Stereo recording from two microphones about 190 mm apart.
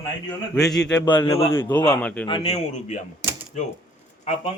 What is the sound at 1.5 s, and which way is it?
Speech, 15° left (ahead or behind).